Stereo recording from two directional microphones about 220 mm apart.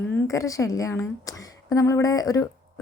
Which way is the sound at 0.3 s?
15° left (ahead or behind).